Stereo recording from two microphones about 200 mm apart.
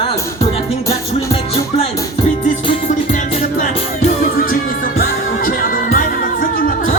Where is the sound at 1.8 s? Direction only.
35° left (ahead or behind).